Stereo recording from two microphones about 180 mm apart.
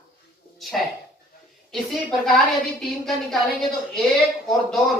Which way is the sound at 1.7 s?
Centre (ahead or behind).